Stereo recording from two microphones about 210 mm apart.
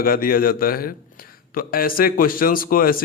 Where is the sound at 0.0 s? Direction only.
45° left (ahead or behind).